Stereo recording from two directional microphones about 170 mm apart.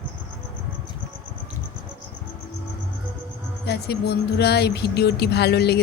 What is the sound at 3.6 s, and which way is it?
Speech, 75° left (ahead or behind).